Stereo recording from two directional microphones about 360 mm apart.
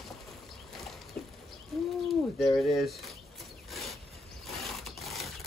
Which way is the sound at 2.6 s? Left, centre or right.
Centre.